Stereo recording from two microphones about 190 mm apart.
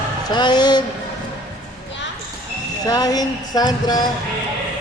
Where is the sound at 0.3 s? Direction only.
20° left (ahead or behind).